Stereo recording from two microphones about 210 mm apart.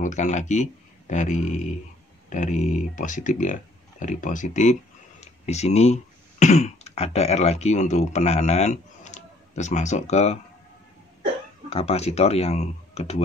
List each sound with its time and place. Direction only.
0.0 s speech: 35° left (ahead or behind)
11.7 s speech: 30° left (ahead or behind)